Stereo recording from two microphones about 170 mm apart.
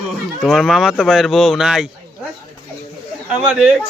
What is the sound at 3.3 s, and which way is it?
Speech, 5° right (ahead or behind).